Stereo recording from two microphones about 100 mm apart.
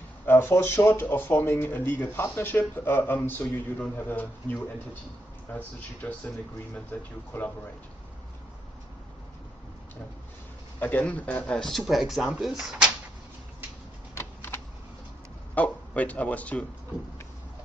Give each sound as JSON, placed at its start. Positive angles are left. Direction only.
{"t": 0.3, "sound": "speech", "side_deg": 25}
{"t": 10.8, "sound": "speech", "side_deg": 15}
{"t": 14.1, "sound": "typing", "side_deg": 20}
{"t": 15.5, "sound": "a man's voice", "side_deg": 15}